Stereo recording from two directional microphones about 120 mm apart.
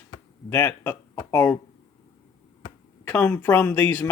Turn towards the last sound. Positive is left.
turn(degrees=15)  # may be behind; listen again after turning